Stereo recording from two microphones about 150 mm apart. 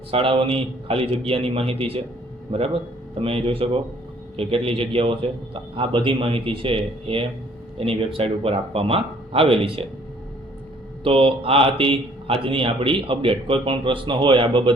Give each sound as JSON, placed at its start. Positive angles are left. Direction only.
{"t": 0.1, "sound": "speech", "side_deg": -35}
{"t": 11.0, "sound": "speech", "side_deg": -40}